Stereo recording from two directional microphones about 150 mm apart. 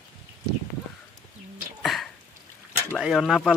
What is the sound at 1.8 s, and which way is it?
Throat clearing, centre (ahead or behind).